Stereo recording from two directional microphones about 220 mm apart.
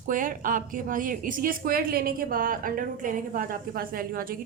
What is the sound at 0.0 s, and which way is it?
A woman's voice, 35° right (ahead or behind).